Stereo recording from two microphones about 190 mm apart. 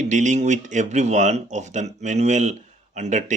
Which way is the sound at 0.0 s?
40° right (ahead or behind).